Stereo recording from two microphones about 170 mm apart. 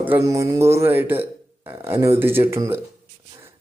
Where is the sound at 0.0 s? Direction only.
15° right (ahead or behind).